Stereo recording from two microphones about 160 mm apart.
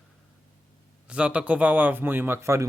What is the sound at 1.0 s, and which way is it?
Speech, 5° right (ahead or behind).